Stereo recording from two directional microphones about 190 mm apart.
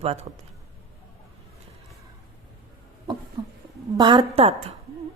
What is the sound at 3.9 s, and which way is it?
Speech, 20° right (ahead or behind).